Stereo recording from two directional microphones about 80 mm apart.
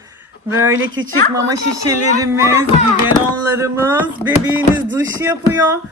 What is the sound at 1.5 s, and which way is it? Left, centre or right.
Speech, right.